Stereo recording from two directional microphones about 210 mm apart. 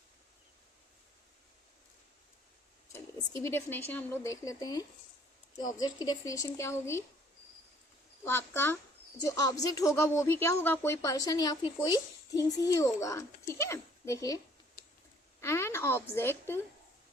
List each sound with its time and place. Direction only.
2.9 s speech: 15° left (ahead or behind)
8.2 s a woman's voice: 10° left (ahead or behind)